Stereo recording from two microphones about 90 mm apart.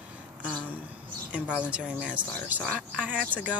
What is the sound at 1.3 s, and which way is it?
Speech, 15° right (ahead or behind).